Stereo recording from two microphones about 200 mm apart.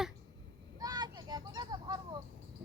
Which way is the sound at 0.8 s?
20° right (ahead or behind).